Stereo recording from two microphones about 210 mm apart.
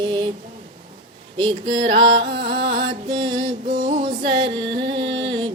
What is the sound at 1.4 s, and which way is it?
Music, 20° right (ahead or behind).